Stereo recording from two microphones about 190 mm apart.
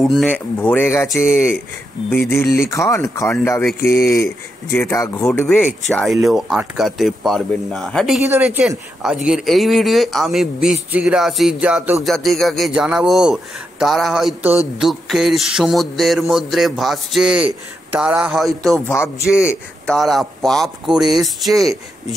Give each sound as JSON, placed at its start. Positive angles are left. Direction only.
{"t": 0.0, "sound": "speech", "side_deg": 0}
{"t": 18.9, "sound": "speech", "side_deg": 15}
{"t": 19.9, "sound": "speech", "side_deg": 0}